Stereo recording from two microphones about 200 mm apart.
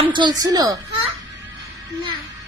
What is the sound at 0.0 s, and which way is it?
Speech, 25° right (ahead or behind).